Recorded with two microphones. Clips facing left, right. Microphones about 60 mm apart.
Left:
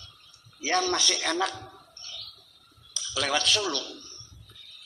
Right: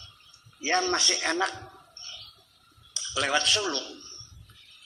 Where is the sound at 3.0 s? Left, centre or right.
Right.